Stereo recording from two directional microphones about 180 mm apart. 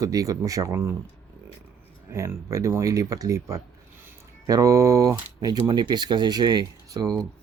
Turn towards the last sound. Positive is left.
turn(degrees=-20)  # may be behind; listen again after turning